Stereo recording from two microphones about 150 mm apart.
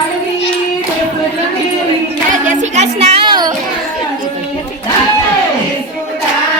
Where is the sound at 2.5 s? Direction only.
50° right (ahead or behind); by 3.5 s 30° right (ahead or behind).